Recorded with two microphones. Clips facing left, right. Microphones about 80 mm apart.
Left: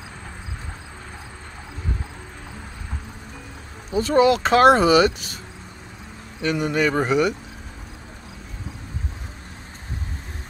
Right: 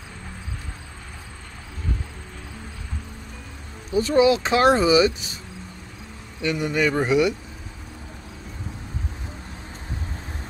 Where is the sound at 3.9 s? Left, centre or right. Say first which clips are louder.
Left 1 dB; left.